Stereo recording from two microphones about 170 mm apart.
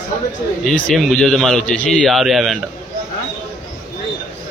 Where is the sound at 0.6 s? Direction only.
Centre (ahead or behind).